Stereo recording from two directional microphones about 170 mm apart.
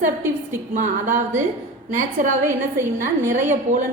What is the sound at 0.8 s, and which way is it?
A woman's voice, 45° right (ahead or behind).